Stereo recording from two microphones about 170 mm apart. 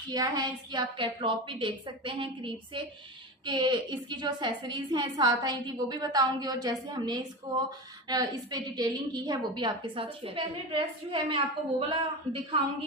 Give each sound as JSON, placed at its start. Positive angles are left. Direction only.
{"t": 0.1, "sound": "a woman's voice", "side_deg": -25}